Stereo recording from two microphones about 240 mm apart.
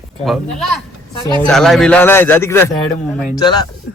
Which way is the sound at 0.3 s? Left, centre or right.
Centre.